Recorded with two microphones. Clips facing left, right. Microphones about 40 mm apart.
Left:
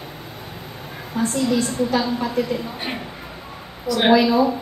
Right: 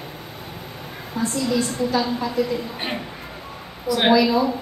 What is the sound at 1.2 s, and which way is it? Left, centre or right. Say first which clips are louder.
Speech: left 2 dB; left.